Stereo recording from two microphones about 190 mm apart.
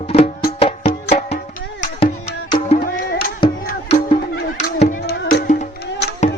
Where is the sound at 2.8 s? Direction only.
50° left (ahead or behind).